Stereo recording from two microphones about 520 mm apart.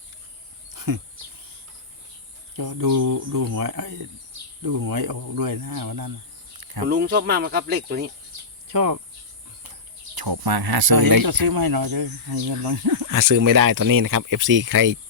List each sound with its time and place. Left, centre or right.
0.7 s dog: right
2.6 s speech: right
6.9 s speech: centre
8.6 s speech: right
10.2 s speech: right